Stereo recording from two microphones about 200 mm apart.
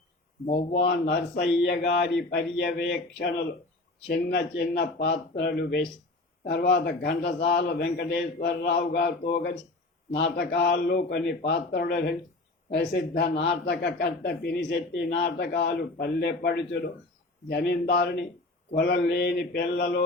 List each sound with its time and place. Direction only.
0.5 s a man's voice: 60° left (ahead or behind)